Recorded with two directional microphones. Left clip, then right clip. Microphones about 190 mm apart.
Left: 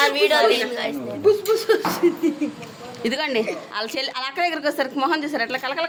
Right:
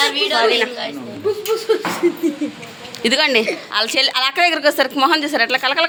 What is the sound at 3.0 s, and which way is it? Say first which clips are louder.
Speech: right 8 dB; 15° right (ahead or behind).